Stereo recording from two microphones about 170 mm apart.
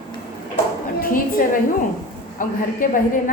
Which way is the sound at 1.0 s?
55° left (ahead or behind).